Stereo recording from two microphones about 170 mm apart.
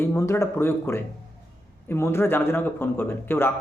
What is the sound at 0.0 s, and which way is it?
A man's voice, 15° left (ahead or behind).